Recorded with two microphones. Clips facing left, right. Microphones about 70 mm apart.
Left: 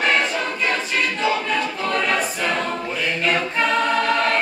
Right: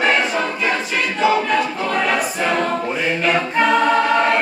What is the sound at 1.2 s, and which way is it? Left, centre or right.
Choir, centre.